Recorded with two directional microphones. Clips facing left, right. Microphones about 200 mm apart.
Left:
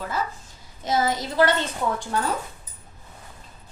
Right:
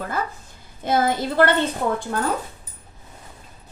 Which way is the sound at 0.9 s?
55° right (ahead or behind).